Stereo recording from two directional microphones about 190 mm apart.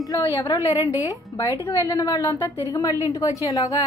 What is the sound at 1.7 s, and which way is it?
A woman's voice, 20° left (ahead or behind).